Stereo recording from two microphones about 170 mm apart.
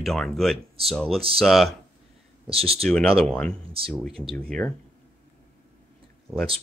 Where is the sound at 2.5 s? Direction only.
35° right (ahead or behind).